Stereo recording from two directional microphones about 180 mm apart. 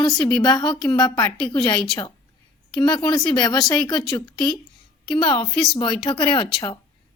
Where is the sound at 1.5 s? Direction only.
25° left (ahead or behind).